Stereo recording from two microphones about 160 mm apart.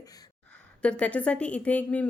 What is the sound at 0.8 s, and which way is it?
A woman's voice, 5° left (ahead or behind).